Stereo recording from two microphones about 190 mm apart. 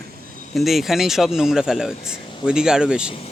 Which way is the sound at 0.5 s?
Centre (ahead or behind).